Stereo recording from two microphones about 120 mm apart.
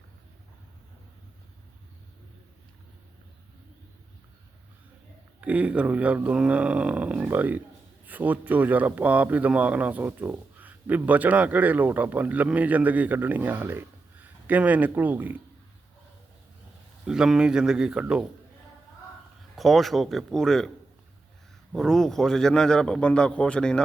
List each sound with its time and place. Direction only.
5.4 s speech: 10° right (ahead or behind)
17.1 s speech: 5° right (ahead or behind)
19.5 s speech: centre (ahead or behind)
21.7 s a man's voice: 5° left (ahead or behind)